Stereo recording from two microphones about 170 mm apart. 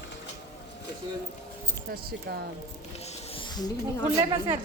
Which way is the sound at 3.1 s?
30° left (ahead or behind).